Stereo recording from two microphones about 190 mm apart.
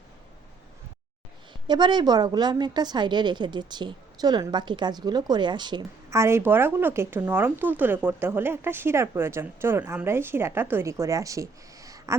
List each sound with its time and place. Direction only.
1.6 s a woman's voice: 25° right (ahead or behind)